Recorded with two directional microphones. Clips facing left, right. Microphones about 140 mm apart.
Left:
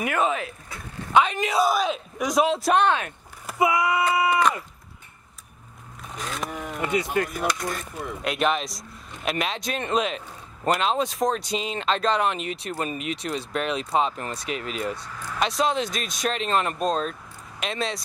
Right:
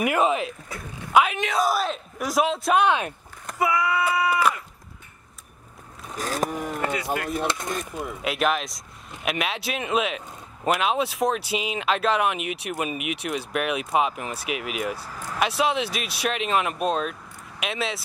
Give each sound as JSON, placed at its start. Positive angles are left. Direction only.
{"t": 0.0, "sound": "speech", "side_deg": -15}
{"t": 1.1, "sound": "a man's voice", "side_deg": -5}
{"t": 2.8, "sound": "speech", "side_deg": -15}
{"t": 3.4, "sound": "speech", "side_deg": 15}
{"t": 6.1, "sound": "speech", "side_deg": -40}
{"t": 7.2, "sound": "speech", "side_deg": -25}
{"t": 8.1, "sound": "speech", "side_deg": 0}